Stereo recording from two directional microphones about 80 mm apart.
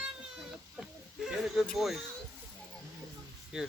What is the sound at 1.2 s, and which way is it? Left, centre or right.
Speech, centre.